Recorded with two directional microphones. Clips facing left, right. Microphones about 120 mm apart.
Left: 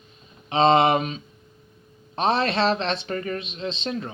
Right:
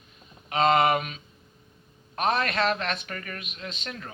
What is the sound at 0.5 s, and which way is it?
Speech, 25° left (ahead or behind).